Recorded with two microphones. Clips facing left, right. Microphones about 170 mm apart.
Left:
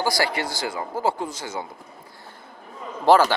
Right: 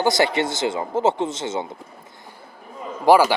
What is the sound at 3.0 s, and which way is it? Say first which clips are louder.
Speech: right 2 dB; 10° right (ahead or behind).